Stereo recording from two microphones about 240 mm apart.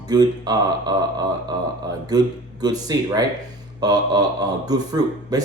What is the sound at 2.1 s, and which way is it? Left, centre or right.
A man's voice, centre.